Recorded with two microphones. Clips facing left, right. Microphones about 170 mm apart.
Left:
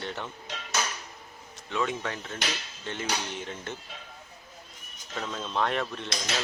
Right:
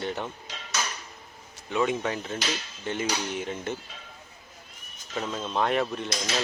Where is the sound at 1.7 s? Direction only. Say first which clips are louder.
Right 4 dB; 15° right (ahead or behind).